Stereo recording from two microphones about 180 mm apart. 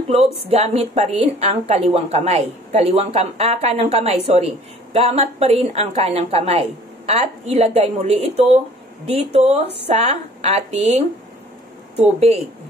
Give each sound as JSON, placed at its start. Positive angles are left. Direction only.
{"t": 0.5, "sound": "a woman's voice", "side_deg": -35}